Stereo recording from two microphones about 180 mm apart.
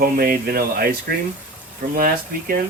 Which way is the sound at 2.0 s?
55° right (ahead or behind).